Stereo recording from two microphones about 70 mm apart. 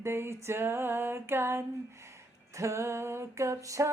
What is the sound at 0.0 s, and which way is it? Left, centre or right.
Female singing, right.